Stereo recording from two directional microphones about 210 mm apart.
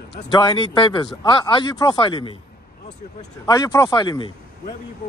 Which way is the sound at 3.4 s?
15° left (ahead or behind).